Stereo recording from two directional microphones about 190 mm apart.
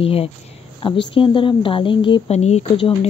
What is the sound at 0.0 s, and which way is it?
Speech, 30° left (ahead or behind).